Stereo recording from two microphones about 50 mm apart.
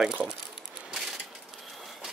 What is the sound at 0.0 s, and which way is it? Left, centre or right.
Speech, centre.